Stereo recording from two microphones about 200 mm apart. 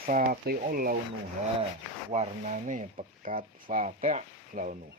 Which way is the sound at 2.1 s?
35° right (ahead or behind).